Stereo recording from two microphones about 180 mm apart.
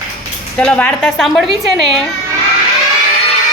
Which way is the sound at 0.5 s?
5° left (ahead or behind).